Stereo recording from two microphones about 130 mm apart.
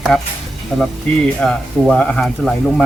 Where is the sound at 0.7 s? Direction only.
5° right (ahead or behind).